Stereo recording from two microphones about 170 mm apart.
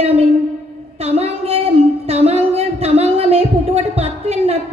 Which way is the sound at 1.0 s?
35° right (ahead or behind).